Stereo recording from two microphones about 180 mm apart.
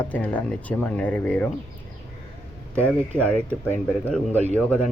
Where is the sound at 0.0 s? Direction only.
5° left (ahead or behind).